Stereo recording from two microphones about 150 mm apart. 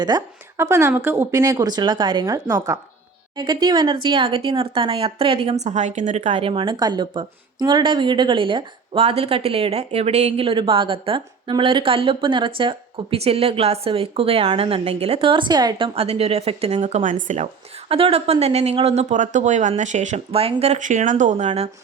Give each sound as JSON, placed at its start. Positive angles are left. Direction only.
{"t": 0.1, "sound": "a woman's voice", "side_deg": -25}
{"t": 16.0, "sound": "speech", "side_deg": -40}